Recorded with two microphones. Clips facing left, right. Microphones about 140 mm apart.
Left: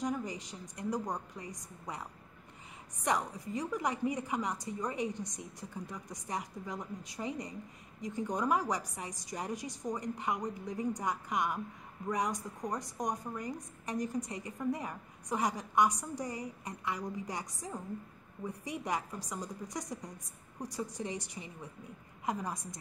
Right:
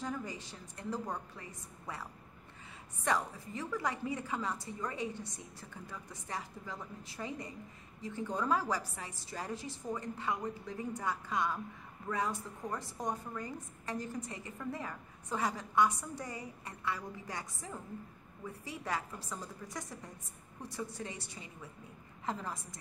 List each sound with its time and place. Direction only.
0.0 s a woman's voice: 20° left (ahead or behind)
3.0 s a woman's voice: 15° left (ahead or behind)